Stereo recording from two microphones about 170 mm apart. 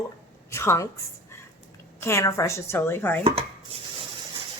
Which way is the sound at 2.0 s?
15° left (ahead or behind).